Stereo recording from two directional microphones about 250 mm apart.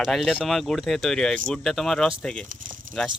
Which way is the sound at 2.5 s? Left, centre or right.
Right.